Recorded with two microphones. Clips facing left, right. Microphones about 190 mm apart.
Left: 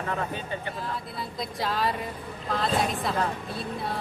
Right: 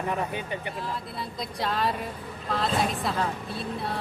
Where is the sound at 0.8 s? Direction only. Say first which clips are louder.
Even; centre (ahead or behind).